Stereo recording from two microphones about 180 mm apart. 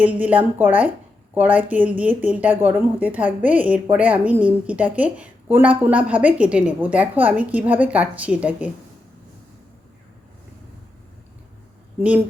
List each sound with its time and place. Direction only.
0.0 s speech: 10° right (ahead or behind)
11.9 s speech: 10° right (ahead or behind)